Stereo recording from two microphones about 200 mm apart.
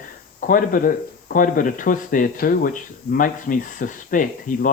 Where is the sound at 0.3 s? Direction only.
40° left (ahead or behind).